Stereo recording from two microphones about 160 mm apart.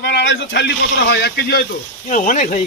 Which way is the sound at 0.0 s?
90° left.